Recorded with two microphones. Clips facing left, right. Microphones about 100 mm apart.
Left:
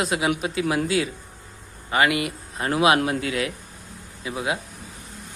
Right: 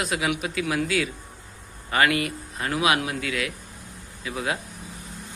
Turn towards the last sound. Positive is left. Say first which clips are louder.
# left 2 dB
turn(degrees=20)  # may be behind; listen again after turning